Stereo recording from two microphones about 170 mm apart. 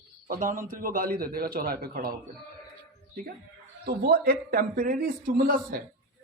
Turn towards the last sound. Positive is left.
turn(degrees=-60)  # may be behind; listen again after turning